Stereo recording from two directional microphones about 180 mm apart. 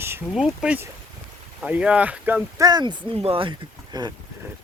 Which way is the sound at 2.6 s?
25° right (ahead or behind).